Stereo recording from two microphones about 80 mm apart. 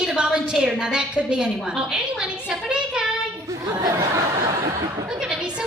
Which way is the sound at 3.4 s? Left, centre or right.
Right.